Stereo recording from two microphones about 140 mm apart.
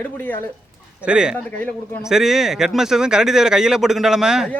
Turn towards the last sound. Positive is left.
turn(degrees=-5)  # may be behind; listen again after turning